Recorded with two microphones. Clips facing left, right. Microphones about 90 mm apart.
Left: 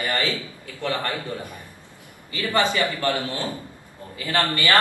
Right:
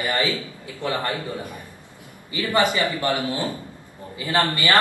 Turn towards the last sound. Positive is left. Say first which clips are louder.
# right 1 dB
turn(degrees=-20)  # may be behind; listen again after turning